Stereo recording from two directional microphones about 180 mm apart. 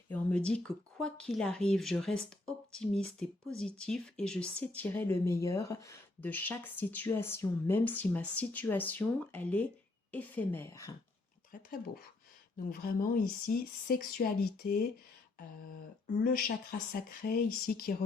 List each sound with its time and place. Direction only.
0.1 s speech: 5° left (ahead or behind)
11.5 s speech: 50° left (ahead or behind)
16.9 s speech: 55° left (ahead or behind)